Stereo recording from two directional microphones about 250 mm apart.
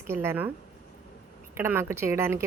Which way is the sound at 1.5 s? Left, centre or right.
Centre.